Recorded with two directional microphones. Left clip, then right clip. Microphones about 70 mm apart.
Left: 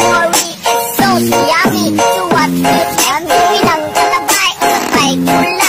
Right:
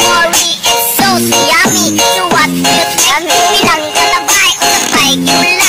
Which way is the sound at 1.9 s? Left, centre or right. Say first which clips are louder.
Right 2 dB; left.